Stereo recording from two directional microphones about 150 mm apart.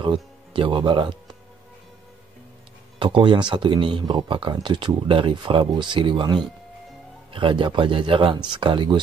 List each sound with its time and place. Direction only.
0.0 s speech: 35° right (ahead or behind)
3.0 s speech: 35° right (ahead or behind)